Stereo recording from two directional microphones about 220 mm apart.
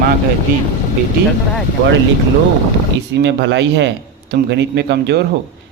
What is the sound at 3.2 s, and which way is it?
A man's voice, 55° right (ahead or behind).